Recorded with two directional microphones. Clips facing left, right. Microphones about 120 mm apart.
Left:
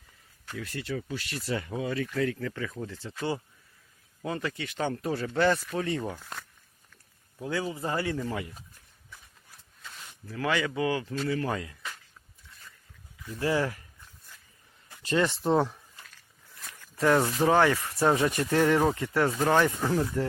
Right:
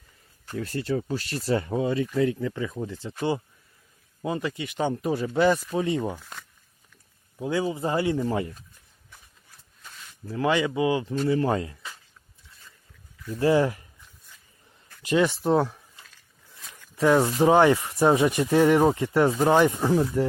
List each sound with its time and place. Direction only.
0.4 s speech: 40° right (ahead or behind); by 6.2 s 15° right (ahead or behind)
7.3 s speech: 20° right (ahead or behind)
10.2 s speech: 25° right (ahead or behind)
13.4 s speech: 25° right (ahead or behind)
15.0 s speech: 10° right (ahead or behind)
17.0 s speech: 10° right (ahead or behind)